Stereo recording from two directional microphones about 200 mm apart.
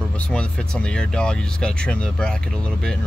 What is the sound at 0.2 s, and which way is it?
Speech, 5° left (ahead or behind).